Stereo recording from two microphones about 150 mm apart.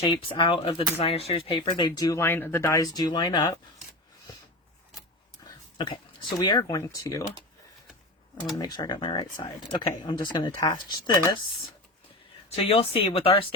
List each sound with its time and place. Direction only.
0.0 s speech: 35° left (ahead or behind)
5.5 s dog: 30° left (ahead or behind)
6.3 s speech: 25° left (ahead or behind)
8.5 s speech: 25° left (ahead or behind)
12.5 s speech: 40° left (ahead or behind)